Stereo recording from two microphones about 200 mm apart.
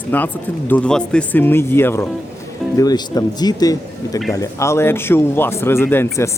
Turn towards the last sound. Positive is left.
turn(degrees=10)  # may be behind; listen again after turning